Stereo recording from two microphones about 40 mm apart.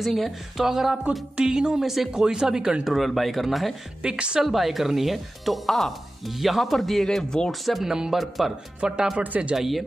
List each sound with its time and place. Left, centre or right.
0.0 s speech: centre
0.7 s speech: centre
1.8 s speech: centre
2.8 s speech: centre
4.1 s speech: right
4.4 s speech: centre
7.8 s speech: centre
8.8 s speech: centre
9.2 s speech: right
9.6 s speech: centre